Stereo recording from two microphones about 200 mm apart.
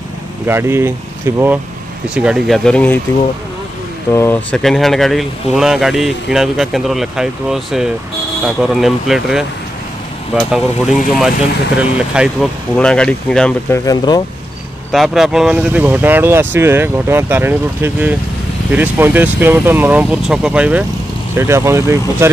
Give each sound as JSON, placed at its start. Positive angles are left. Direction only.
{"t": 0.5, "sound": "speech", "side_deg": -10}
{"t": 4.1, "sound": "speech", "side_deg": 10}
{"t": 13.8, "sound": "speech", "side_deg": 20}
{"t": 14.9, "sound": "speech", "side_deg": 0}